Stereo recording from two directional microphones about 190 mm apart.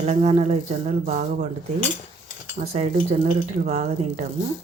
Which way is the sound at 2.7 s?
35° right (ahead or behind).